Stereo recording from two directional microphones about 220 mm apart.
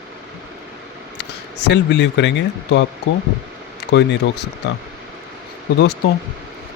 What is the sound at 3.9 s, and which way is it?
Speech, 50° left (ahead or behind).